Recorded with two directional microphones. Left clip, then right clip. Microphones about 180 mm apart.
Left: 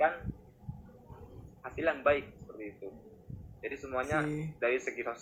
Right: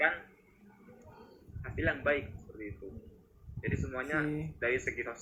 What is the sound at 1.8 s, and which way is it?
Speech, 25° right (ahead or behind).